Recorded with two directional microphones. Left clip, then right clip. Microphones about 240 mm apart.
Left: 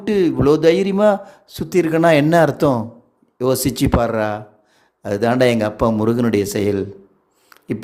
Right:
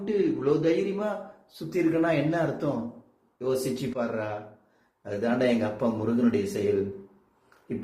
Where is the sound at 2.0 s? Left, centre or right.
Left.